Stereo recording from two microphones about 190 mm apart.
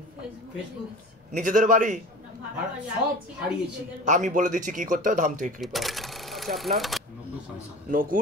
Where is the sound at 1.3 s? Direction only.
40° right (ahead or behind).